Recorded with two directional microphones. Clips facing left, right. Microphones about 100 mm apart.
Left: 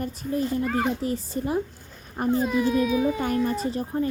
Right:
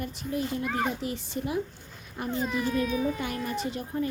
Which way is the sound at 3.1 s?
40° left (ahead or behind).